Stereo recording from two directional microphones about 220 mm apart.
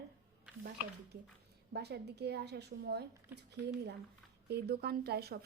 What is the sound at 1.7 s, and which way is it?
Speech, 50° right (ahead or behind).